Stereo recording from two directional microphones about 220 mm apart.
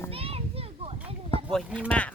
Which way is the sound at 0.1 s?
25° right (ahead or behind).